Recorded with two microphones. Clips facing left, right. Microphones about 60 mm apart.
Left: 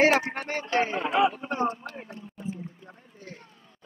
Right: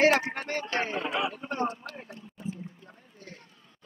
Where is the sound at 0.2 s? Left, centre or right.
Left.